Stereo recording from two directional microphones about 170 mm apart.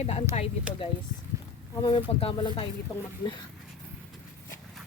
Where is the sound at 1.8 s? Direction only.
30° left (ahead or behind).